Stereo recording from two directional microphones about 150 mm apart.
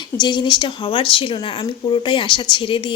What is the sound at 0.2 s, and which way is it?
Speech, 30° left (ahead or behind).